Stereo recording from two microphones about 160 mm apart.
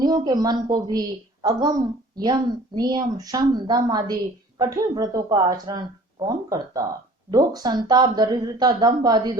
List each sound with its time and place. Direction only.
0.0 s a woman's voice: 25° right (ahead or behind)
2.7 s a woman's voice: 25° right (ahead or behind)